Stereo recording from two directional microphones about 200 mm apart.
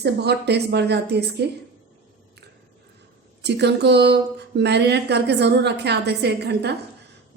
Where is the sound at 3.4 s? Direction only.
60° right (ahead or behind).